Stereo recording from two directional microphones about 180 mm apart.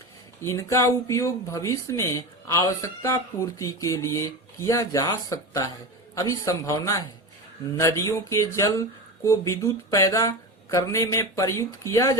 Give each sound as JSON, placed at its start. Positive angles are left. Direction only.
{"t": 0.4, "sound": "speech", "side_deg": 15}